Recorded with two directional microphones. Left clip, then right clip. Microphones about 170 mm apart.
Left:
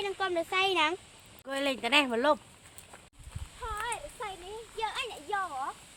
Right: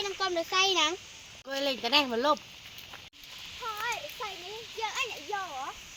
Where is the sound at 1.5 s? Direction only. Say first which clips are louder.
Even; 15° left (ahead or behind).